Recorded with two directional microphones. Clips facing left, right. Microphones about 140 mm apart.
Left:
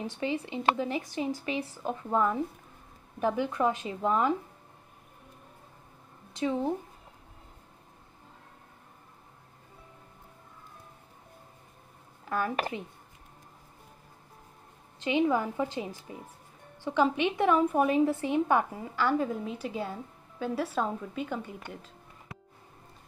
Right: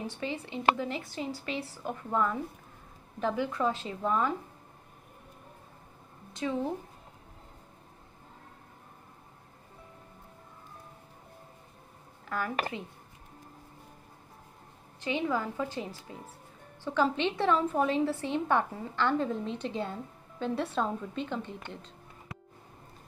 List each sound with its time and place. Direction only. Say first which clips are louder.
0.0 s a woman's voice: left 4 dB; 20° left (ahead or behind)
6.4 s a woman's voice: left 2 dB; 20° left (ahead or behind)
12.3 s speech: left 2 dB; 20° left (ahead or behind)
15.0 s a woman's voice: left 4 dB; 20° left (ahead or behind)